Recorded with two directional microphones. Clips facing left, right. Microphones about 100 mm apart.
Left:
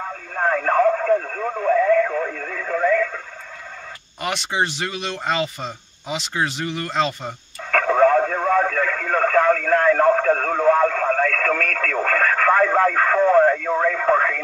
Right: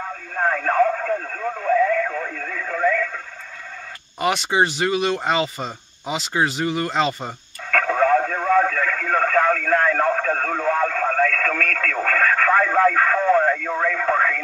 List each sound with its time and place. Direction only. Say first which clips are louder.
0.5 s radio: left 2 dB; 35° left (ahead or behind)
4.2 s speech: right 4 dB; 5° right (ahead or behind)
7.7 s radio: left 2 dB; 30° left (ahead or behind)